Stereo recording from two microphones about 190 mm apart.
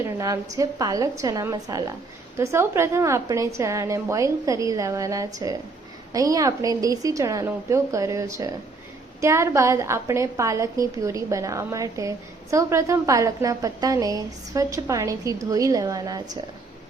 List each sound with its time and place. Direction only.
0.0 s a woman's voice: 15° right (ahead or behind)